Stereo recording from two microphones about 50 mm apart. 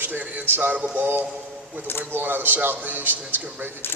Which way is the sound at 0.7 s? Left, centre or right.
Right.